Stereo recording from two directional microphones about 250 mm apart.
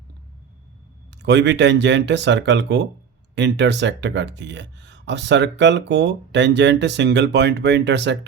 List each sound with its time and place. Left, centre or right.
1.1 s speech: right